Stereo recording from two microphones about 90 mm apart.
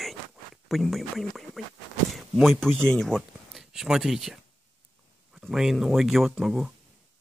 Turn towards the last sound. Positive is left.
turn(degrees=0)  # may be behind; listen again after turning